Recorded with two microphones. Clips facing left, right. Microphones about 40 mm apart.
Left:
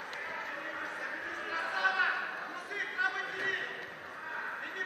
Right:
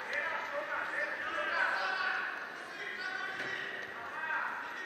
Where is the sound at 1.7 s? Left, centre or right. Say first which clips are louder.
Left 3 dB; left.